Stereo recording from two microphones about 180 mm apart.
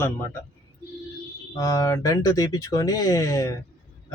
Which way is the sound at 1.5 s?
20° left (ahead or behind).